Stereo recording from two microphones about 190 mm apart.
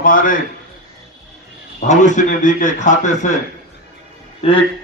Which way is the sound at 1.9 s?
40° left (ahead or behind).